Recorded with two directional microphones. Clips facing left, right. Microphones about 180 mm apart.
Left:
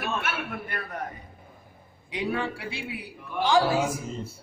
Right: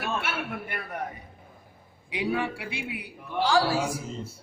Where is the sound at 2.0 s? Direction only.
10° right (ahead or behind).